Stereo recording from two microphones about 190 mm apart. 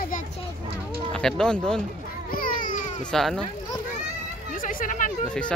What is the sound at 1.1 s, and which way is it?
Speech, 5° left (ahead or behind).